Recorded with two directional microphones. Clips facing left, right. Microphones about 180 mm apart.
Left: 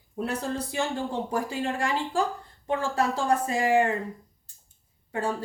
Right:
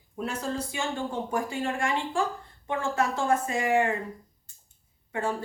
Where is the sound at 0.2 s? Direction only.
35° left (ahead or behind).